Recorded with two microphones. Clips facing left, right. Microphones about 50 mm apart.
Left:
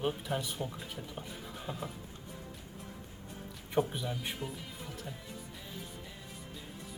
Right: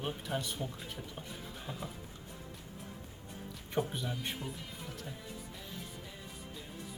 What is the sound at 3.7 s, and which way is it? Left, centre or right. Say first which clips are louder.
Speech: left 3 dB; centre.